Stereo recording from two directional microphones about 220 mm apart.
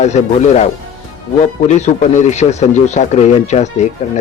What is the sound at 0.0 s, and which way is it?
Speech, 30° left (ahead or behind).